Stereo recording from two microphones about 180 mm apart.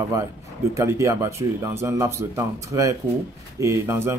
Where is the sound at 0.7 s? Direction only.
15° right (ahead or behind).